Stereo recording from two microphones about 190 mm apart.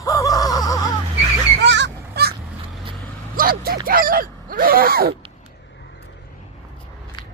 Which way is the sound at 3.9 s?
50° right (ahead or behind).